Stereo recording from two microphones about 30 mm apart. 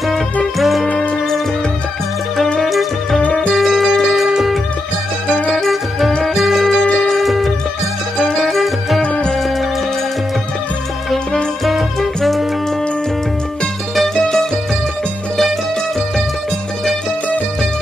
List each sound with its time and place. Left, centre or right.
0.6 s music: centre
2.6 s music: centre
5.7 s music: centre
9.0 s music: left
14.0 s music: centre